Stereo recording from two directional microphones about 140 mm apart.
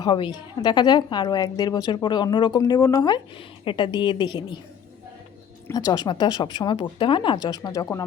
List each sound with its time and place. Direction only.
0.0 s a woman's voice: 35° left (ahead or behind)
5.7 s a woman's voice: 30° left (ahead or behind)